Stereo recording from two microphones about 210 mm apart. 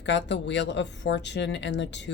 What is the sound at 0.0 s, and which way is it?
Speech, 55° left (ahead or behind).